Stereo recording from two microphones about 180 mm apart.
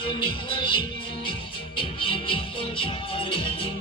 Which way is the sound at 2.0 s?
30° left (ahead or behind).